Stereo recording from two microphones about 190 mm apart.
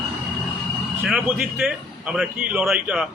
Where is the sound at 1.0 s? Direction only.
5° right (ahead or behind).